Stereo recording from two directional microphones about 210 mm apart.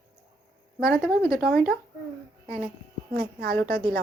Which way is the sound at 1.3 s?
5° left (ahead or behind).